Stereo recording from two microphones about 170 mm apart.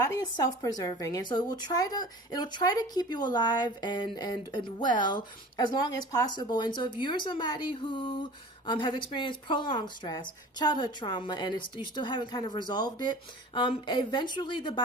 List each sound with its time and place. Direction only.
0.0 s a woman's voice: 20° left (ahead or behind)